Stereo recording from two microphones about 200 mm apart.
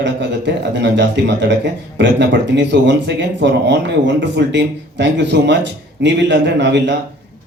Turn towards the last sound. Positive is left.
turn(degrees=-60)  # may be behind; listen again after turning